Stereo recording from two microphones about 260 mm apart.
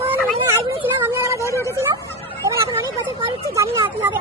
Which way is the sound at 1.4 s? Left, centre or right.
Centre.